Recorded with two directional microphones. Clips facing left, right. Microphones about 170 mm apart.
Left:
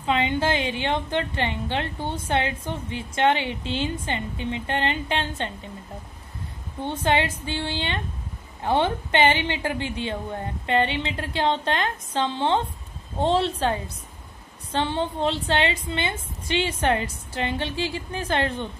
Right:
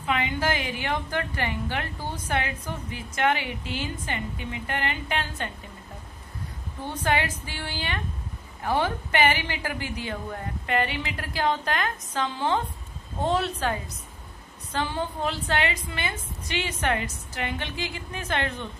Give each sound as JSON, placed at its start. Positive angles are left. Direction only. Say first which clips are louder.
{"t": 0.0, "sound": "a woman's voice", "louder": "left 4 dB", "side_deg": 25}
{"t": 6.8, "sound": "a woman's voice", "louder": "left 3 dB", "side_deg": 25}